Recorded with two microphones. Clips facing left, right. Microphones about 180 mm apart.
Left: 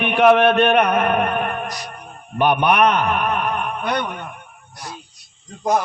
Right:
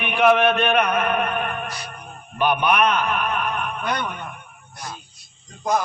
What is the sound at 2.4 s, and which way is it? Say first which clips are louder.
A man's voice: left 3 dB; 65° left (ahead or behind).